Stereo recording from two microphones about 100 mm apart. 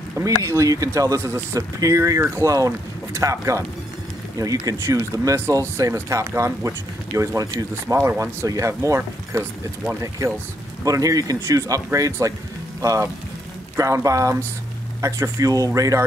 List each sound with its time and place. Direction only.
0.2 s speech: 30° right (ahead or behind)